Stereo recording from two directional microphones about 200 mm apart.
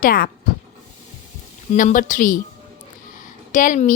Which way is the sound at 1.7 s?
40° left (ahead or behind).